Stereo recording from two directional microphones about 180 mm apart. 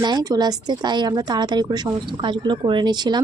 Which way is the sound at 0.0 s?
20° right (ahead or behind).